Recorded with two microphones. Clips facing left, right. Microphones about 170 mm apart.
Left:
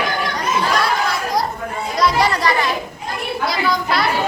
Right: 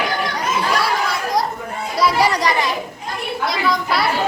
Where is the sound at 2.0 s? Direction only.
10° right (ahead or behind).